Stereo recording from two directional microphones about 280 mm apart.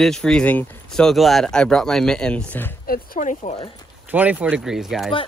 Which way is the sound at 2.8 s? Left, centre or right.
Left.